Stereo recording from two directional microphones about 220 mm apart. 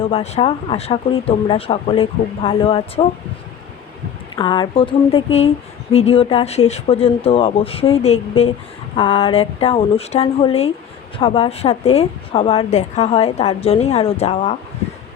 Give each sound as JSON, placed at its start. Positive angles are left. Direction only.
{"t": 0.0, "sound": "a woman's voice", "side_deg": 30}
{"t": 4.4, "sound": "a woman's voice", "side_deg": 20}